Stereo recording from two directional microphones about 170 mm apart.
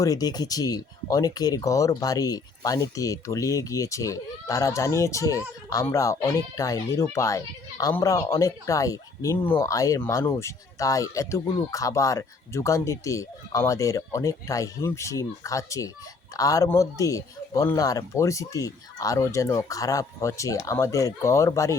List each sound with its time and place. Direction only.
0.0 s speech: 20° left (ahead or behind)